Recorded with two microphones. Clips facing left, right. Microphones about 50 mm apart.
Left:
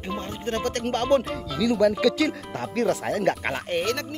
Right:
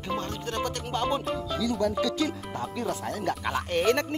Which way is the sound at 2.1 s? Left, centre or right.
Left.